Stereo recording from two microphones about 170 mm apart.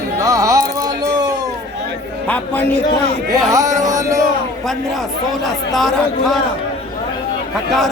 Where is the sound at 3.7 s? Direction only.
20° right (ahead or behind).